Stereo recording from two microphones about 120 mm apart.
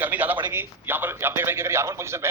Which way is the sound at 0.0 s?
15° right (ahead or behind).